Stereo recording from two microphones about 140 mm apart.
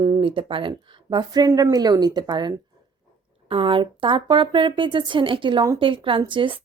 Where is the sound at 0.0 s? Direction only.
35° right (ahead or behind).